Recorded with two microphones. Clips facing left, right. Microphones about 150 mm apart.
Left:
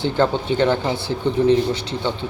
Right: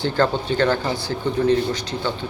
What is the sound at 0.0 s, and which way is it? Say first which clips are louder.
Speech: left 1 dB; 20° left (ahead or behind).